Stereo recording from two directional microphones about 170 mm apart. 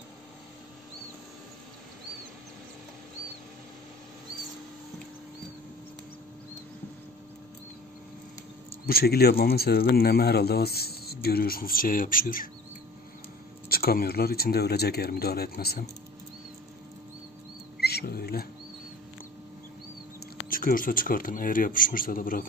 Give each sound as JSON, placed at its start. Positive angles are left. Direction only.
{"t": 8.8, "sound": "speech", "side_deg": 65}
{"t": 13.7, "sound": "speech", "side_deg": 60}
{"t": 17.7, "sound": "speech", "side_deg": 65}
{"t": 20.4, "sound": "speech", "side_deg": 55}